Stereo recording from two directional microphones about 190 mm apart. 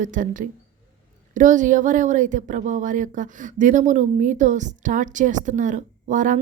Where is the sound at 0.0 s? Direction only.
45° right (ahead or behind).